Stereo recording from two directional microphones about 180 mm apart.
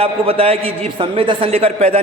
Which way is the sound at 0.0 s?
30° right (ahead or behind).